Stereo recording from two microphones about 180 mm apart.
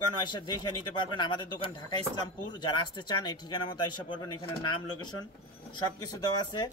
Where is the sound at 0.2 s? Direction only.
25° left (ahead or behind).